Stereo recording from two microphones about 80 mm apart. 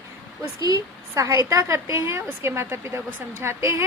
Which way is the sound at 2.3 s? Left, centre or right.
Right.